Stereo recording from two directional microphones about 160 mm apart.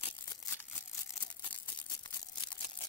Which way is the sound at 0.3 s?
15° left (ahead or behind).